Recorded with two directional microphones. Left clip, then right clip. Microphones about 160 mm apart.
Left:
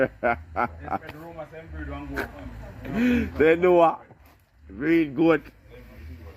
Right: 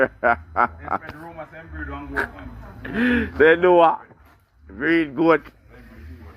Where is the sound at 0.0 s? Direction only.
55° left (ahead or behind).